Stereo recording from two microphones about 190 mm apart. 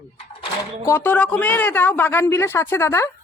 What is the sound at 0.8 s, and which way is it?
A man's voice, 10° left (ahead or behind).